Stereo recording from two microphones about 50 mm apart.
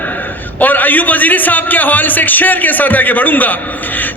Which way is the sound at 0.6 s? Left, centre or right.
Left.